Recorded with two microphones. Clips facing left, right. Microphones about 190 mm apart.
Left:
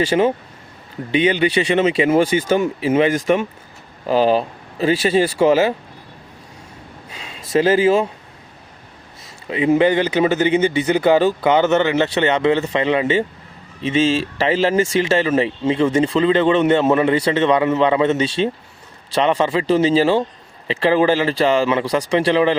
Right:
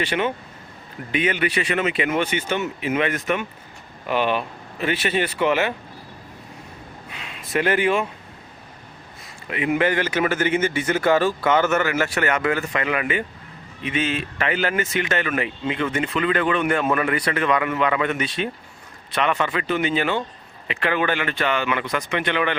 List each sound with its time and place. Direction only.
0.0 s speech: 30° left (ahead or behind)
7.3 s speech: 30° left (ahead or behind)
9.5 s speech: 25° left (ahead or behind)